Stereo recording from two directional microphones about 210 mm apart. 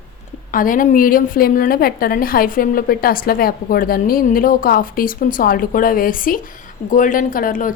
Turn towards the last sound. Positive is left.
turn(degrees=40)  # may be behind; listen again after turning